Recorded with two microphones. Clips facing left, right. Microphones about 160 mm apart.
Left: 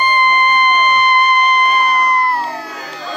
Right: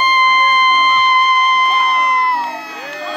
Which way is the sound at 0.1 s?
10° right (ahead or behind).